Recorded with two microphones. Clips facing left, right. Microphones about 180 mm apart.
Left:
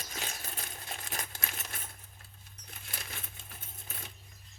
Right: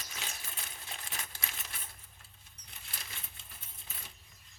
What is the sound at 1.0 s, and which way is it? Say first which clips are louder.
Crumpling: left 4 dB; 45° left (ahead or behind).